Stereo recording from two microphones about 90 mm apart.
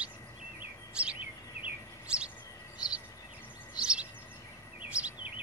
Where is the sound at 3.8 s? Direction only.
10° right (ahead or behind).